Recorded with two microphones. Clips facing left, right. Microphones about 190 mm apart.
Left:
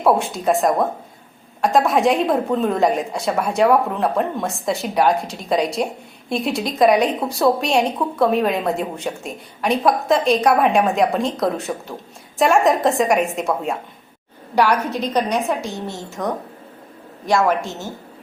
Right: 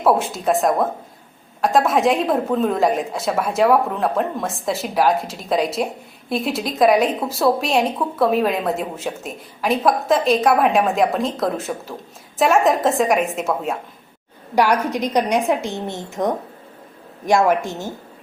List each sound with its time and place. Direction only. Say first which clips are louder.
0.0 s a woman's voice: even; centre (ahead or behind)
14.5 s a woman's voice: even; 15° right (ahead or behind)